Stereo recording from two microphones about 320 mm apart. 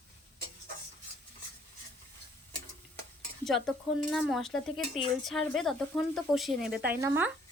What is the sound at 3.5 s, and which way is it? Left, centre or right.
A woman's voice, centre.